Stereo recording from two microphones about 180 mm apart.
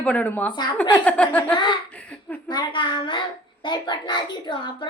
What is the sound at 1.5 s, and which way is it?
A child's voice, 25° left (ahead or behind).